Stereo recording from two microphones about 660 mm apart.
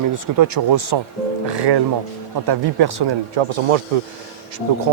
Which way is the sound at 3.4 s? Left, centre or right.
Right.